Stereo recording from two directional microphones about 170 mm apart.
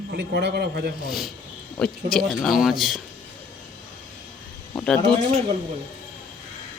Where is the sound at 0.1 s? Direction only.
70° right (ahead or behind).